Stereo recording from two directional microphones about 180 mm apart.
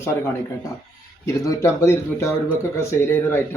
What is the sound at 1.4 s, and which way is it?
Speech, 15° left (ahead or behind).